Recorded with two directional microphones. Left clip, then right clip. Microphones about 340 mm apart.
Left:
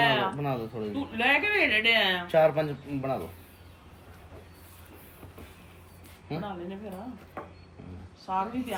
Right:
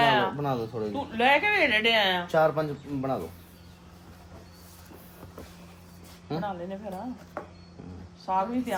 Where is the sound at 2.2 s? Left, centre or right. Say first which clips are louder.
Left 1 dB; centre.